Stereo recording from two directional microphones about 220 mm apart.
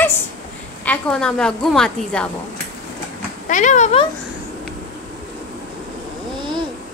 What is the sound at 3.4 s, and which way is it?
Speech, 35° left (ahead or behind).